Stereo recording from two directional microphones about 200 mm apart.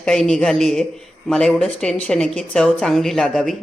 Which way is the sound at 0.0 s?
5° left (ahead or behind).